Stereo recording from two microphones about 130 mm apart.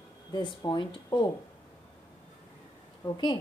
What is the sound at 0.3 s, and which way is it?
Speech, 35° left (ahead or behind).